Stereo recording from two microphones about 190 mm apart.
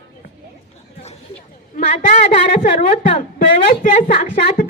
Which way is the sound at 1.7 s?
40° left (ahead or behind).